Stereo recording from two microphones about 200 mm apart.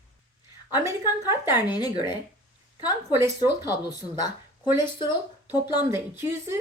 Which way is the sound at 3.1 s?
10° right (ahead or behind).